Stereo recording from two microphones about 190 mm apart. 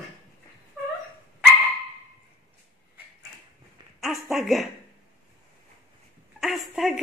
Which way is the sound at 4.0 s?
Centre (ahead or behind).